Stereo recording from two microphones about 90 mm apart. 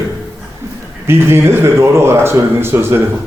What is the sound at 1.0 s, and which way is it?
Speech, 30° right (ahead or behind).